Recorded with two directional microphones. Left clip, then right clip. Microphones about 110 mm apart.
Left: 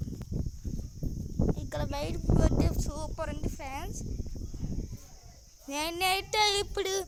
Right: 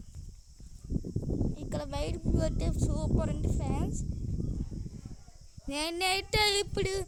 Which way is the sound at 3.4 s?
30° right (ahead or behind).